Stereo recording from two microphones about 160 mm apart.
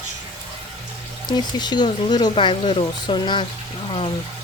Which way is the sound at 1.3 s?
25° left (ahead or behind).